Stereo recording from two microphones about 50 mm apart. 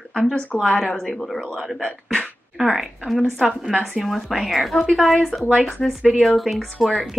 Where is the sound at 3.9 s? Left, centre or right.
Centre.